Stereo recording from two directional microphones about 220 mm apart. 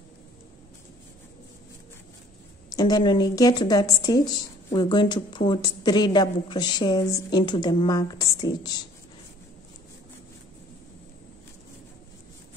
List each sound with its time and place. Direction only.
2.7 s a woman's voice: 15° left (ahead or behind)